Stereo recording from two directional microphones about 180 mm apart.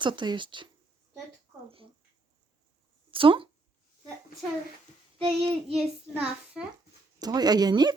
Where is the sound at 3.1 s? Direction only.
30° right (ahead or behind).